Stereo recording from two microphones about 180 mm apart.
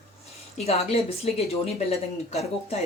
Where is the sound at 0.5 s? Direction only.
35° left (ahead or behind).